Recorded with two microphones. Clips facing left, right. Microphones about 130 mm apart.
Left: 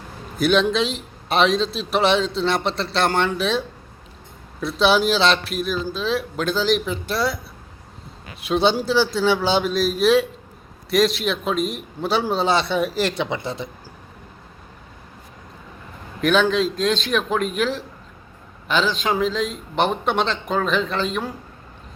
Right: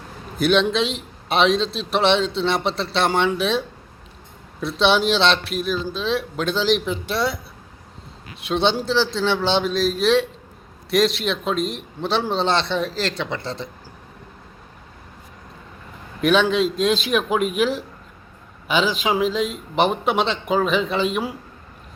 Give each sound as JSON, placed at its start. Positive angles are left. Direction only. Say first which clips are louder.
{"t": 0.3, "sound": "a man's voice", "louder": "even", "side_deg": 0}
{"t": 4.6, "sound": "a man's voice", "louder": "left 1 dB", "side_deg": 0}
{"t": 8.4, "sound": "a man's voice", "louder": "left 1 dB", "side_deg": 5}
{"t": 16.2, "sound": "a man's voice", "louder": "right 1 dB", "side_deg": 0}